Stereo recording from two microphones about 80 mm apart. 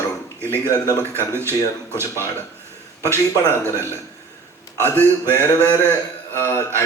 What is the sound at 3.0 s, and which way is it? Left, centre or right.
A man's voice, left.